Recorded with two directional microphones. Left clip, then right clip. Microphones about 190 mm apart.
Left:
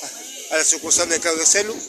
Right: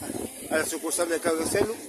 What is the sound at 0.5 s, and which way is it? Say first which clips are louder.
Speech: left 8 dB; 5° right (ahead or behind).